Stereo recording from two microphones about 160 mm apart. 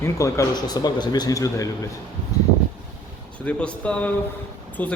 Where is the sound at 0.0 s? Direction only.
20° left (ahead or behind).